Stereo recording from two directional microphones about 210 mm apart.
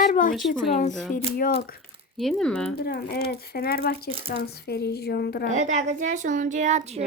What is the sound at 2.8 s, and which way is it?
A child's voice, 45° left (ahead or behind).